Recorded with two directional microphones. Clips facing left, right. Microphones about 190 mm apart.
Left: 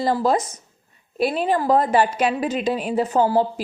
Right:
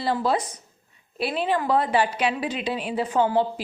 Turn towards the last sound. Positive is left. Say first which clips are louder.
# left 3 dB
turn(degrees=40)  # may be behind; listen again after turning